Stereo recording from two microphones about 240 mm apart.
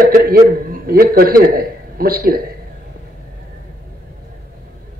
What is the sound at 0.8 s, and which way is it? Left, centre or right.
A man's voice, right.